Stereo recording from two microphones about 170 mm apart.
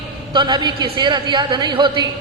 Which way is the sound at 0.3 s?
25° right (ahead or behind).